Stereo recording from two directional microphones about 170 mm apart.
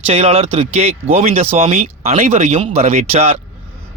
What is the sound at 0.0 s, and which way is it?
Speech, 40° right (ahead or behind).